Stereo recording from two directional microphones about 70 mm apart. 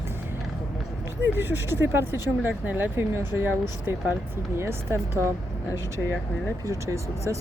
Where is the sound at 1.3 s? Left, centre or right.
Right.